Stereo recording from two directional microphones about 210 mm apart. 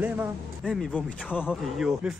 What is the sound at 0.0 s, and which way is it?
A man's voice, 5° right (ahead or behind).